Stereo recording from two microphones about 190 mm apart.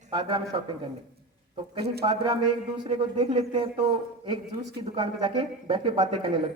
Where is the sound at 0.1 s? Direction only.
25° right (ahead or behind).